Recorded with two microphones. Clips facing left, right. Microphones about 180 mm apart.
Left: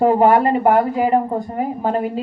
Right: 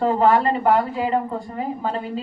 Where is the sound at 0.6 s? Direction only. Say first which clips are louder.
Left 4 dB; 50° left (ahead or behind).